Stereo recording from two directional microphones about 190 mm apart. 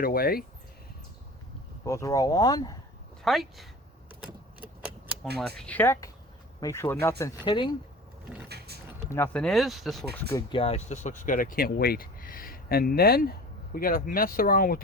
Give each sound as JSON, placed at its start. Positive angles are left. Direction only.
{"t": 0.0, "sound": "speech", "side_deg": 50}
{"t": 1.8, "sound": "speech", "side_deg": 15}
{"t": 3.2, "sound": "speech", "side_deg": 0}
{"t": 4.6, "sound": "typewriter", "side_deg": -5}
{"t": 5.4, "sound": "speech", "side_deg": 5}
{"t": 8.4, "sound": "a sound", "side_deg": -60}
{"t": 9.0, "sound": "speech", "side_deg": 15}
{"t": 10.3, "sound": "speech", "side_deg": 30}